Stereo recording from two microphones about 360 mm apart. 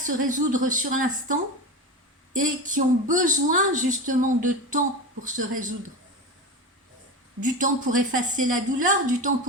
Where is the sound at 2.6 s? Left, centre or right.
Right.